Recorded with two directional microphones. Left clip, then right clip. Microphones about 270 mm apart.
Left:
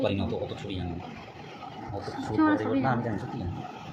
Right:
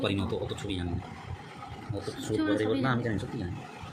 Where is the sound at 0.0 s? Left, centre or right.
Right.